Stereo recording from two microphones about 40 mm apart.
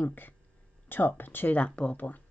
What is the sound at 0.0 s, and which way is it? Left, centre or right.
Speech, left.